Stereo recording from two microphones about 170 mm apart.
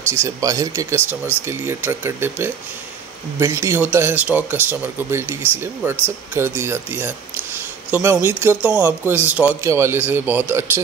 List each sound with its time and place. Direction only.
0.1 s speech: 15° right (ahead or behind)